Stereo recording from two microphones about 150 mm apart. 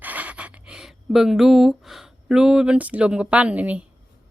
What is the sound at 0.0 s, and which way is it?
Speech, 10° right (ahead or behind).